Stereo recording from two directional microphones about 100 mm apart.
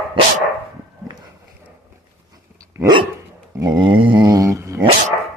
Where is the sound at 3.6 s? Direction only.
45° right (ahead or behind).